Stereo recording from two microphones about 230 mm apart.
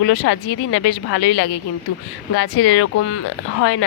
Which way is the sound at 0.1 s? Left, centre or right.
Left.